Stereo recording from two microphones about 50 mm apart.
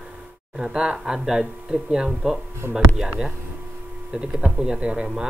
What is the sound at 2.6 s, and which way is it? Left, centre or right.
Speech, right.